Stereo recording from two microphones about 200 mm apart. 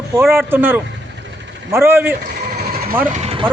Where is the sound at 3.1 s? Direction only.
30° right (ahead or behind).